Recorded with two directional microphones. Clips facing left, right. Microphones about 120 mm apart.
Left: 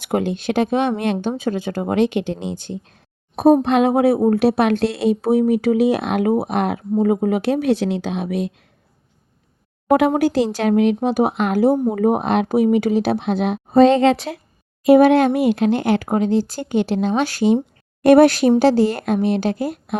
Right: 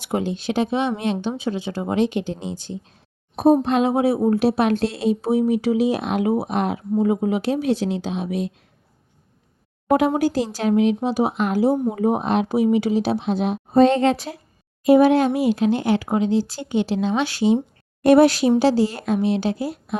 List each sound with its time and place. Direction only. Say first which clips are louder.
0.0 s speech: left 3 dB; 60° left (ahead or behind)
7.0 s speech: left 3 dB; 50° left (ahead or behind)
10.2 s speech: left 4 dB; 70° left (ahead or behind)
14.8 s speech: left 3 dB; 65° left (ahead or behind)